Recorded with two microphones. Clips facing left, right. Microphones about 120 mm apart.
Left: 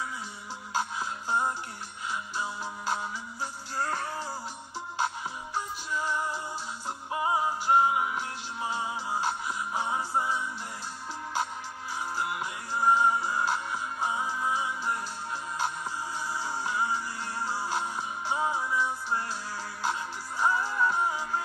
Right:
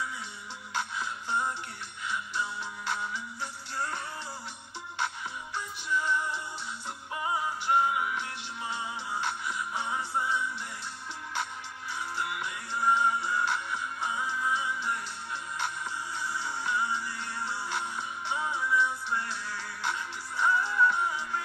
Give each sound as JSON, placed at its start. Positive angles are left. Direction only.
{"t": 0.7, "sound": "music", "side_deg": 35}
{"t": 4.9, "sound": "music", "side_deg": 35}
{"t": 12.2, "sound": "music", "side_deg": 40}
{"t": 16.3, "sound": "music", "side_deg": 35}